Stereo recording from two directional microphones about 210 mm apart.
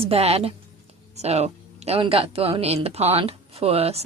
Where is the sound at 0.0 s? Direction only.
30° right (ahead or behind).